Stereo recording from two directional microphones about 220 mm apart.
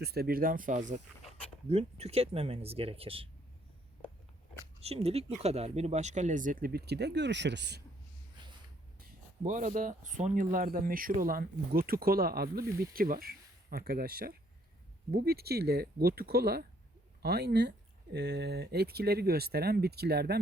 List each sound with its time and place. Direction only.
0.0 s speech: 45° right (ahead or behind); by 3.2 s 25° right (ahead or behind)
4.8 s speech: 25° right (ahead or behind); by 7.8 s 50° right (ahead or behind)
8.4 s a sound: 20° right (ahead or behind)
9.0 s speech: 35° right (ahead or behind)